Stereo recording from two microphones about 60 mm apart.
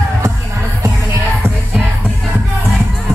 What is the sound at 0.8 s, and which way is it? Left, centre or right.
Music, right.